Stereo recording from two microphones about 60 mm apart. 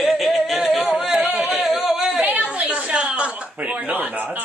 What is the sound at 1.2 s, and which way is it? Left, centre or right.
Speech, right.